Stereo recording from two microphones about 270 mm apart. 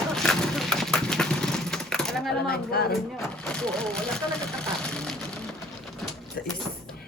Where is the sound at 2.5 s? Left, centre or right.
Left.